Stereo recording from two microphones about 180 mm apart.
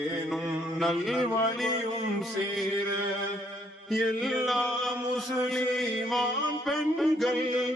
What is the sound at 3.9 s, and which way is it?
Mantra, centre (ahead or behind).